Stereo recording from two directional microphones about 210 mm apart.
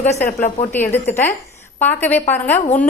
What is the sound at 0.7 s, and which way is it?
A woman's voice, 10° left (ahead or behind).